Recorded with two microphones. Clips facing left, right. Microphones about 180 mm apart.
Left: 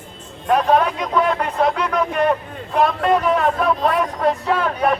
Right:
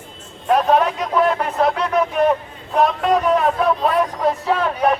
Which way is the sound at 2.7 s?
5° left (ahead or behind).